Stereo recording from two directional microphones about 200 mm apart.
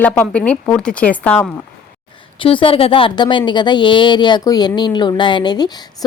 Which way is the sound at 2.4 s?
25° left (ahead or behind).